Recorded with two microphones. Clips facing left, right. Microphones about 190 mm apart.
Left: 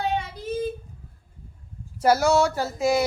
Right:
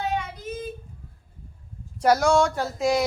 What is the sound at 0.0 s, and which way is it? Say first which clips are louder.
Child singing: left 1 dB; 30° left (ahead or behind).